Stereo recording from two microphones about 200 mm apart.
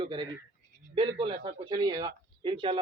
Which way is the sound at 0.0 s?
25° right (ahead or behind).